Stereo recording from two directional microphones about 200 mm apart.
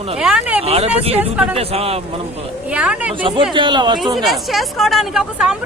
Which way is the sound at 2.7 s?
5° right (ahead or behind).